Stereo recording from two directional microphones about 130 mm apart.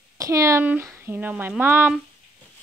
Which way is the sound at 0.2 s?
25° right (ahead or behind).